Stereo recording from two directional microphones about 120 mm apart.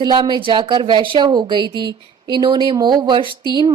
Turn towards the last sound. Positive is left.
turn(degrees=-40)  # may be behind; listen again after turning